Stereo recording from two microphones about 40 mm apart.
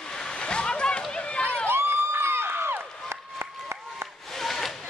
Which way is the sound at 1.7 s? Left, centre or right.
Right.